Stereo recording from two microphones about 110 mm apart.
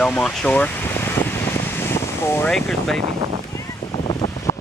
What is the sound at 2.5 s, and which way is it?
Speech, 5° left (ahead or behind).